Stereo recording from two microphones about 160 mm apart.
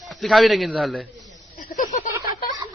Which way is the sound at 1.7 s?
50° left (ahead or behind).